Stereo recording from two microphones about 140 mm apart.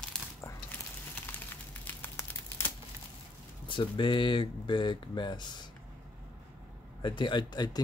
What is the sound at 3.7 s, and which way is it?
Speech, 35° left (ahead or behind).